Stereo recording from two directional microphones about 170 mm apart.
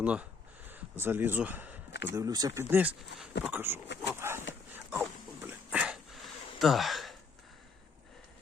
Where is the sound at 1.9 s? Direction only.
80° left.